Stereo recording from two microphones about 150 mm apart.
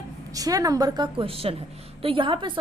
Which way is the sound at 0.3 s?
25° right (ahead or behind).